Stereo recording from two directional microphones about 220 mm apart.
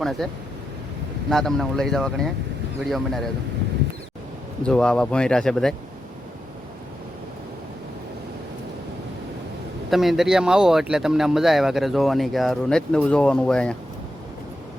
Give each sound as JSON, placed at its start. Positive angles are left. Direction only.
{"t": 0.0, "sound": "speech", "side_deg": 0}
{"t": 1.3, "sound": "speech", "side_deg": 0}
{"t": 4.6, "sound": "speech", "side_deg": 5}
{"t": 9.9, "sound": "speech", "side_deg": 0}